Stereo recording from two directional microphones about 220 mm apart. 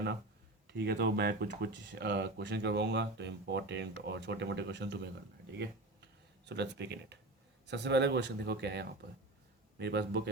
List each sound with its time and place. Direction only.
0.7 s speech: 50° right (ahead or behind)
6.4 s speech: 50° right (ahead or behind)